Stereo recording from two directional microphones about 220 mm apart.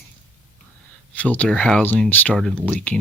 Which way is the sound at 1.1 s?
5° left (ahead or behind).